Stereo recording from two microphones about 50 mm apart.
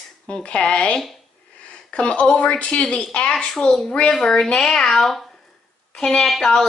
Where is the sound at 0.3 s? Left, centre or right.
Left; by 3.9 s centre.